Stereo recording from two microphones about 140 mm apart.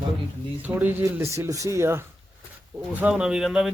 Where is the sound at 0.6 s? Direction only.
10° right (ahead or behind).